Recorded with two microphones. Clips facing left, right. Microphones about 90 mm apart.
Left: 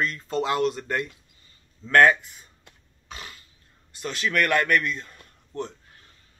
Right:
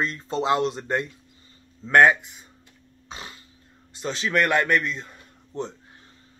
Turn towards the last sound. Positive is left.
turn(degrees=-20)  # may be behind; listen again after turning